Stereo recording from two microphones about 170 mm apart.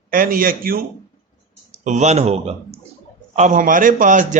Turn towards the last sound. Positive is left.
turn(degrees=-50)  # may be behind; listen again after turning